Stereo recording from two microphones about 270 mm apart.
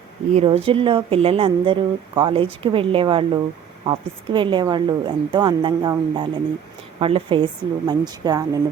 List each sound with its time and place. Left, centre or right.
0.3 s a woman's voice: right